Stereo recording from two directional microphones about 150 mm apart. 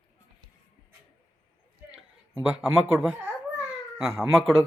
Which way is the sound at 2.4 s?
5° right (ahead or behind).